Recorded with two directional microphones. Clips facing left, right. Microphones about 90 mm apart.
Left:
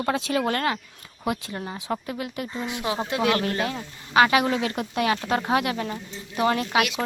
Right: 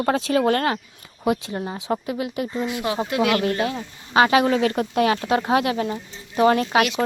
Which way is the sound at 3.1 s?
25° left (ahead or behind).